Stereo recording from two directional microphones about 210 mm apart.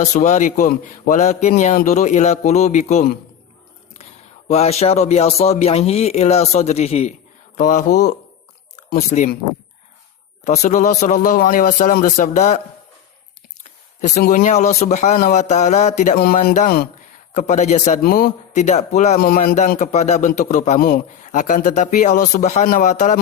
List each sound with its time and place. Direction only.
0.0 s a man's voice: 35° left (ahead or behind)
4.4 s a man's voice: 30° left (ahead or behind)
10.4 s a man's voice: 35° left (ahead or behind)
14.0 s a man's voice: 35° left (ahead or behind)